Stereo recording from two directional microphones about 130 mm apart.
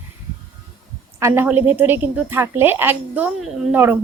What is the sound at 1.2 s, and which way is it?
A woman's voice, 20° right (ahead or behind).